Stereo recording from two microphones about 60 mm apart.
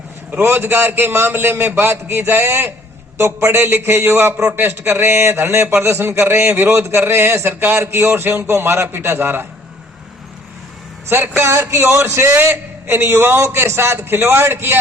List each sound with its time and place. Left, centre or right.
0.3 s a man's voice: right
11.1 s a man's voice: right
11.5 s a man's voice: right
11.8 s a man's voice: right
12.3 s a man's voice: right